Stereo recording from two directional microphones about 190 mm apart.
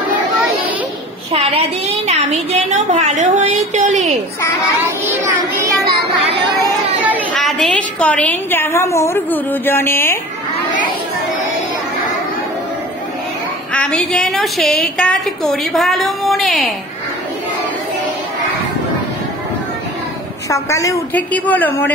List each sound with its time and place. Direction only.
1.3 s a woman's voice: 30° right (ahead or behind)
5.0 s child singing: 10° right (ahead or behind)
7.0 s a sound: 10° right (ahead or behind)
7.3 s a woman's voice: centre (ahead or behind)
13.7 s a woman's voice: 5° left (ahead or behind)
20.4 s a woman's voice: 15° left (ahead or behind)